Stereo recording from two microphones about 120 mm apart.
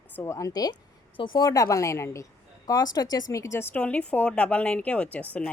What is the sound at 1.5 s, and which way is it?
A woman's voice, 25° left (ahead or behind).